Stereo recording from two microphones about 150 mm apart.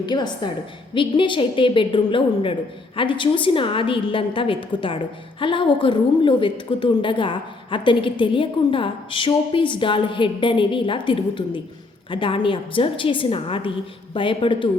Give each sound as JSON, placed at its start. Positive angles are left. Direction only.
{"t": 0.0, "sound": "a woman's voice", "side_deg": 30}